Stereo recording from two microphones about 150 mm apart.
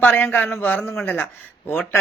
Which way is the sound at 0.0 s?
15° left (ahead or behind).